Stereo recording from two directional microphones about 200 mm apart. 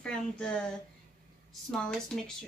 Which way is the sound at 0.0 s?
5° left (ahead or behind).